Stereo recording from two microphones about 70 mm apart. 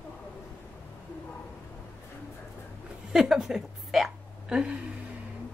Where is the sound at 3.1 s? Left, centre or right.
Centre.